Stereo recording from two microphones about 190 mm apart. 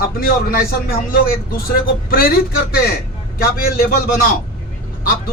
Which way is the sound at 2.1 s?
55° left (ahead or behind).